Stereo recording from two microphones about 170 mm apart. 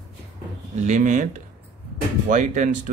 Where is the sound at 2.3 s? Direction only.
45° right (ahead or behind).